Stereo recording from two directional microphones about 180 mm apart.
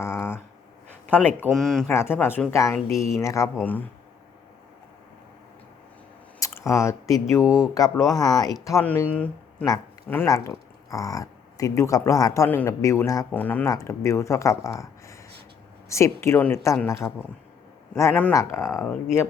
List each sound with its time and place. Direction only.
0.0 s a sound: 10° left (ahead or behind)
1.5 s speech: centre (ahead or behind)
1.9 s speech: 15° left (ahead or behind)
6.4 s speech: 15° left (ahead or behind)
9.6 s speech: 20° left (ahead or behind)
18.8 s speech: centre (ahead or behind)